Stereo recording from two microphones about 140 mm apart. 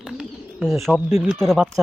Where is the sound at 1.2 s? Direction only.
Centre (ahead or behind).